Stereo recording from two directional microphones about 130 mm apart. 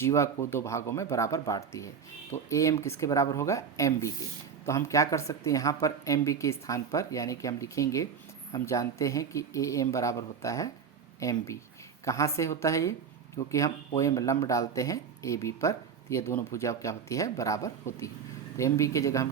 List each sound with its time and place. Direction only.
0.0 s speech: 20° left (ahead or behind)